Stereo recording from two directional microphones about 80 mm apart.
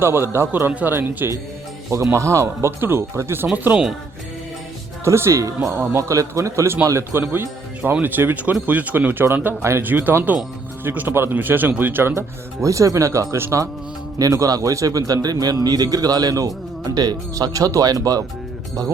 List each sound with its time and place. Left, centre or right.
0.0 s a man's voice: right
0.7 s speech: centre
1.2 s speech: right
2.1 s a man's voice: right
5.0 s a man's voice: right
12.6 s a man's voice: right
14.2 s speech: right